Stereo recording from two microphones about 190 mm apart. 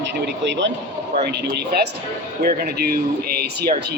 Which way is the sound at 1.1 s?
60° right (ahead or behind).